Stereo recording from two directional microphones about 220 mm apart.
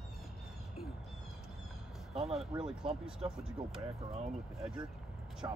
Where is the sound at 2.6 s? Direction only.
5° right (ahead or behind).